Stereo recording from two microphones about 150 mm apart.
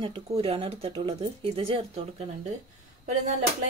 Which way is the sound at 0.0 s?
35° right (ahead or behind).